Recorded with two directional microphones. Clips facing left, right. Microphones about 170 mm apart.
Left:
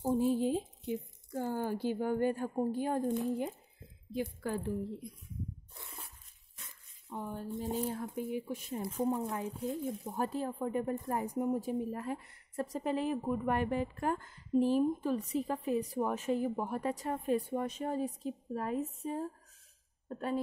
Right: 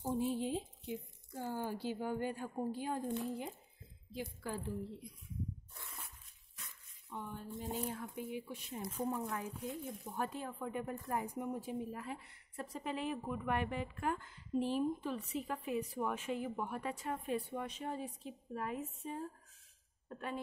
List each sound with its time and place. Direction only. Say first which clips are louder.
0.0 s a sound: left 7 dB; 40° left (ahead or behind)
1.3 s a woman's voice: left 6 dB; 50° left (ahead or behind)
7.1 s a woman's voice: left 6 dB; 40° left (ahead or behind)
9.0 s a woman's voice: left 5 dB; 25° left (ahead or behind)